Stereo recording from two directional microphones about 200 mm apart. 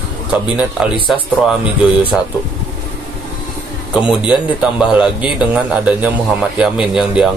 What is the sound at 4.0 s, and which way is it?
A man's voice, 5° right (ahead or behind).